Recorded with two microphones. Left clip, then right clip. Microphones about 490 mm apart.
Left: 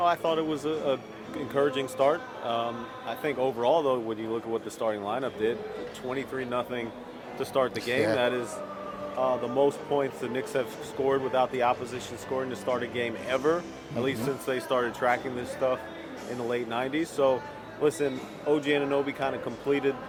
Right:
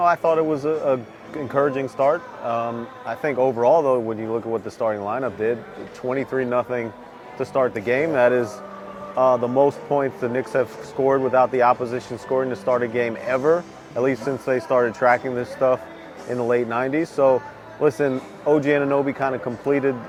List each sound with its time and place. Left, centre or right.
0.0 s a man's voice: right